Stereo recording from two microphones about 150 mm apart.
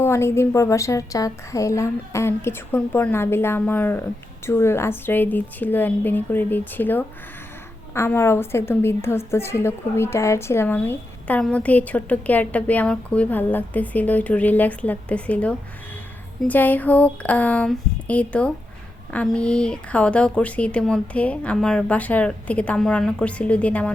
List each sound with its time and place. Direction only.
0.0 s a woman's voice: 15° left (ahead or behind)